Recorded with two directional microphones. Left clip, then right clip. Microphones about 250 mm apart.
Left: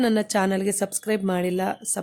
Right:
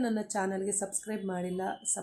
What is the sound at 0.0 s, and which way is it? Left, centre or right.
A woman's voice, left.